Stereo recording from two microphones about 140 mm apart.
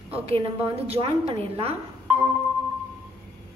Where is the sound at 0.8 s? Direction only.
45° right (ahead or behind).